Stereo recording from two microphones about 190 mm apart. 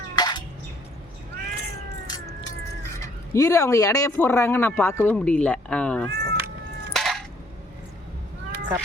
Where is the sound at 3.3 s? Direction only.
15° left (ahead or behind).